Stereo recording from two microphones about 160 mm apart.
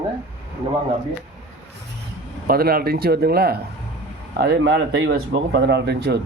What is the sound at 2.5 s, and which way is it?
Speech, 70° right (ahead or behind).